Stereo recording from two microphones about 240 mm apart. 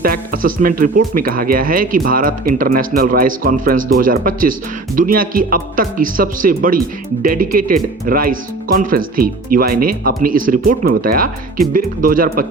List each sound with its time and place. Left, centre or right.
0.0 s speech: right